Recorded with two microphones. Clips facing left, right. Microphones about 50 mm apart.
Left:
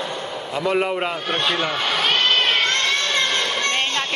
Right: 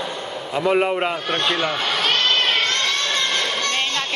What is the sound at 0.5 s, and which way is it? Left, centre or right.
A man's voice, centre.